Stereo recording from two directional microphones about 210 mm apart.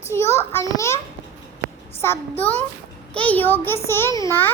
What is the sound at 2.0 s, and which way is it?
A child's voice, 10° left (ahead or behind).